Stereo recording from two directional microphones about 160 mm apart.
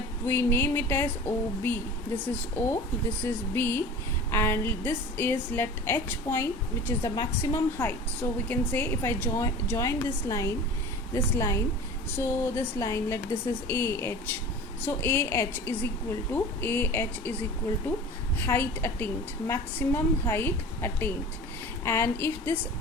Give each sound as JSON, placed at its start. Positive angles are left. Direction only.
{"t": 0.3, "sound": "a woman's voice", "side_deg": 15}
{"t": 7.2, "sound": "speech", "side_deg": 25}
{"t": 7.8, "sound": "a woman's voice", "side_deg": 15}
{"t": 18.3, "sound": "a woman's voice", "side_deg": 15}